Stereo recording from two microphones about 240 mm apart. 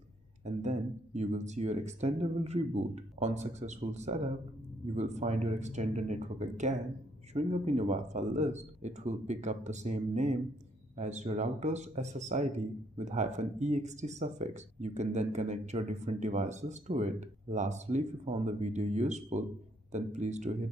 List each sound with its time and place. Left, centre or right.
0.6 s a man's voice: right